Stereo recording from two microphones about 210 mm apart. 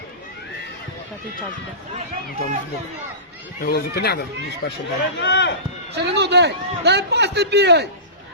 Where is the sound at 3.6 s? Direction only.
50° left (ahead or behind).